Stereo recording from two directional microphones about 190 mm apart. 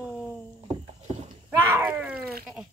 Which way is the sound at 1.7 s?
10° right (ahead or behind).